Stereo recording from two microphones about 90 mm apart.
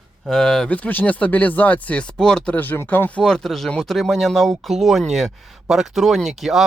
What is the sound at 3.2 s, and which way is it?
Speech, 10° left (ahead or behind).